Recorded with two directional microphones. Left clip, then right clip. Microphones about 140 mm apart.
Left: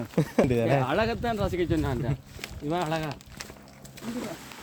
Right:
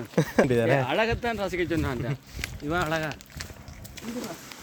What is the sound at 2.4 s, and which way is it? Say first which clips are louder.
Speech: right 2 dB; 5° left (ahead or behind).